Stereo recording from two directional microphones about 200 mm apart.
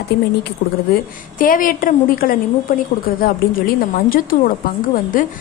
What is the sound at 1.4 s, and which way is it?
A woman's voice, 45° left (ahead or behind).